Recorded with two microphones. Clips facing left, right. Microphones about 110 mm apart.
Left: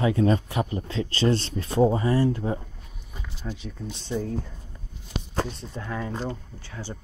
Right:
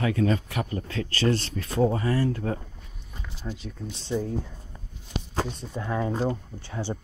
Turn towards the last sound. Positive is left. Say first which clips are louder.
# right 5 dB
turn(degrees=-20)  # may be behind; listen again after turning